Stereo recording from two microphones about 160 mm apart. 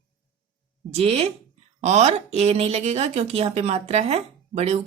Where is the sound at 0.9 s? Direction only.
40° right (ahead or behind).